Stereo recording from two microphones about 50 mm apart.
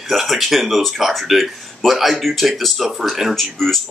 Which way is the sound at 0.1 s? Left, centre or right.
Centre.